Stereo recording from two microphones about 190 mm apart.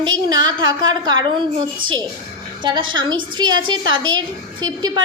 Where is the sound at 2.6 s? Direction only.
25° right (ahead or behind).